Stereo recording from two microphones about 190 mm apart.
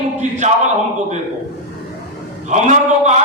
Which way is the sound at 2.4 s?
40° right (ahead or behind).